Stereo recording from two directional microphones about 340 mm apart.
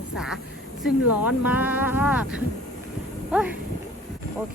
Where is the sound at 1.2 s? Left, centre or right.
Centre.